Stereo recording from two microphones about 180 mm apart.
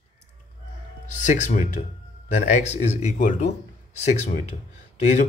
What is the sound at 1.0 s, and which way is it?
A man's voice, 40° left (ahead or behind).